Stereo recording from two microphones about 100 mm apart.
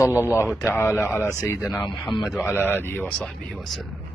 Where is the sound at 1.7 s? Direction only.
Centre (ahead or behind).